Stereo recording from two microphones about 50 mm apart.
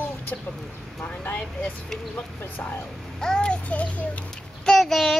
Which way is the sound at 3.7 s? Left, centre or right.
Left.